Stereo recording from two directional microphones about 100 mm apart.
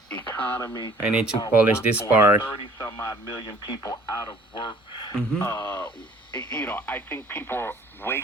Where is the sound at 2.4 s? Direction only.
20° left (ahead or behind).